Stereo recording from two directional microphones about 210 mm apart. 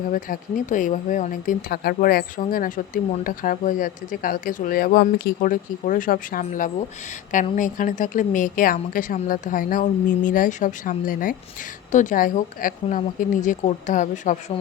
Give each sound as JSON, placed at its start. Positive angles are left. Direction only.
{"t": 0.1, "sound": "a woman's voice", "side_deg": 40}